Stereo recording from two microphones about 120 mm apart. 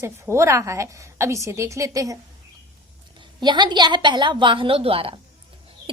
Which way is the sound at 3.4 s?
35° right (ahead or behind).